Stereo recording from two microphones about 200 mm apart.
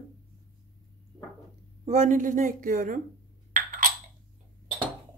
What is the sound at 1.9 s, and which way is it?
A woman's voice, 40° right (ahead or behind).